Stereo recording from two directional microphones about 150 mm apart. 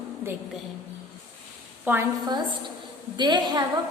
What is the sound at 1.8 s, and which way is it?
Speech, 15° right (ahead or behind).